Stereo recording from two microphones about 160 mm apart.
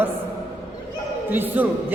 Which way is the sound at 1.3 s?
10° right (ahead or behind).